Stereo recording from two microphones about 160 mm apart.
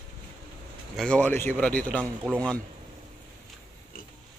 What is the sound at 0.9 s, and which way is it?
Speech, 5° left (ahead or behind).